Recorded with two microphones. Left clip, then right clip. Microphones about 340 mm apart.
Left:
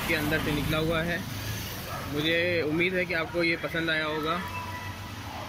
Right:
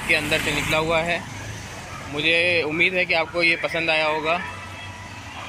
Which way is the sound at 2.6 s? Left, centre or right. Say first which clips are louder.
Right 6 dB; right.